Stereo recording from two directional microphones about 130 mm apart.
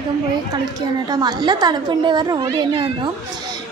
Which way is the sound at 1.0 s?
30° right (ahead or behind).